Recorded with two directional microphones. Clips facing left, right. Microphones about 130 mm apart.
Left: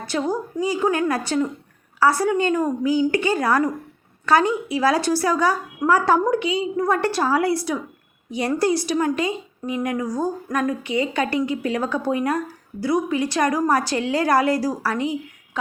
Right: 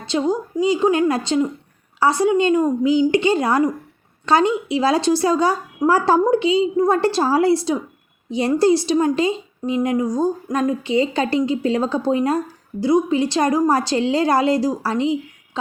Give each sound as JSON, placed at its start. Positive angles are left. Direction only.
{"t": 0.0, "sound": "speech", "side_deg": -20}